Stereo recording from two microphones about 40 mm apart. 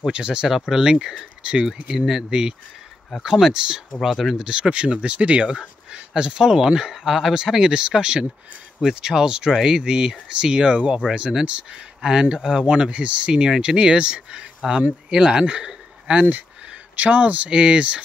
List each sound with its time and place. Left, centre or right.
0.0 s speech: right
0.5 s speech: centre
1.7 s speech: centre
3.9 s speech: centre
4.4 s speech: right
5.5 s speech: right
6.4 s speech: centre
12.6 s speech: right
17.5 s speech: right